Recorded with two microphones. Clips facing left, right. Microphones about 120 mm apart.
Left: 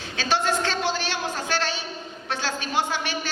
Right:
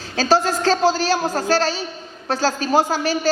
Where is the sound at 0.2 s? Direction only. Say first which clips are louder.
Right 6 dB; 35° right (ahead or behind).